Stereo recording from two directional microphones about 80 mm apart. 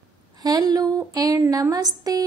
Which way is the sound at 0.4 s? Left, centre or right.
Right.